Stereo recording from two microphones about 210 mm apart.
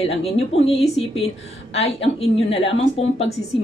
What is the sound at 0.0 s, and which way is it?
A woman's voice, 30° left (ahead or behind).